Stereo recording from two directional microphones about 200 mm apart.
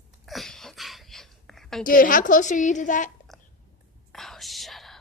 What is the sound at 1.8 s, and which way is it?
A woman's voice, 45° left (ahead or behind).